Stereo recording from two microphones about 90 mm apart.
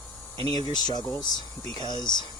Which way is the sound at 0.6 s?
50° left (ahead or behind).